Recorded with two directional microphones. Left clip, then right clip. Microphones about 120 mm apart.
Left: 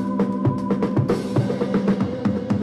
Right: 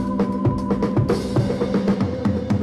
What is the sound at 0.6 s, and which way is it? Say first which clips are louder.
Drum: even; 45° left (ahead or behind).